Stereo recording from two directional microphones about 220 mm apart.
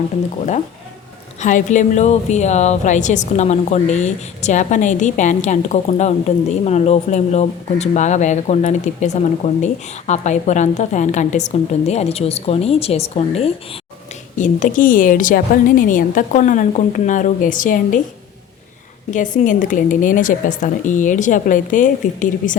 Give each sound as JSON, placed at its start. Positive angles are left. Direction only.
{"t": 1.4, "sound": "a woman's voice", "side_deg": 35}
{"t": 19.4, "sound": "a woman's voice", "side_deg": 35}